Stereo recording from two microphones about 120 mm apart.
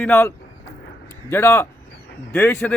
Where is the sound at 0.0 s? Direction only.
20° left (ahead or behind).